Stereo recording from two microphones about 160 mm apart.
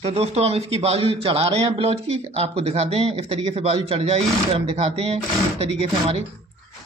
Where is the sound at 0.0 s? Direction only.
40° right (ahead or behind).